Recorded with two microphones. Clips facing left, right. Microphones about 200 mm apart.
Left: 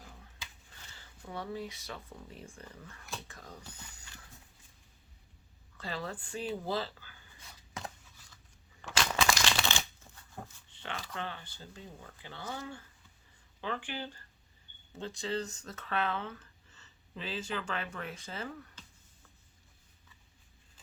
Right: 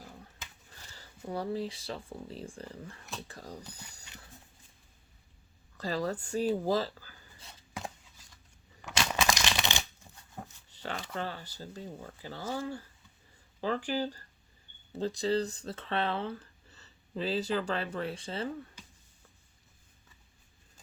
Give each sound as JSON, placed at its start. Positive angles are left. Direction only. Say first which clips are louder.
{"t": 1.2, "sound": "speech", "louder": "right 6 dB", "side_deg": -35}
{"t": 5.7, "sound": "speech", "louder": "right 7 dB", "side_deg": -40}
{"t": 8.8, "sound": "crumpling", "louder": "even", "side_deg": -20}
{"t": 10.7, "sound": "a sound", "louder": "right 5 dB", "side_deg": -40}
{"t": 11.1, "sound": "speech", "louder": "right 4 dB", "side_deg": -35}
{"t": 18.8, "sound": "a sound", "louder": "right 2 dB", "side_deg": -10}